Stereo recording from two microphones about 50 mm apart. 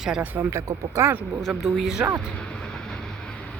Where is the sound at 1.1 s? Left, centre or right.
Right.